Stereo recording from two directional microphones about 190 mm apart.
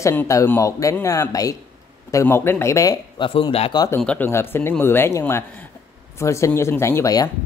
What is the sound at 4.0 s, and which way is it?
Speech, 10° left (ahead or behind).